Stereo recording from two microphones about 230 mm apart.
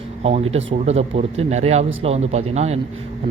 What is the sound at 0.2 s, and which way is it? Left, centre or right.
A man's voice, right.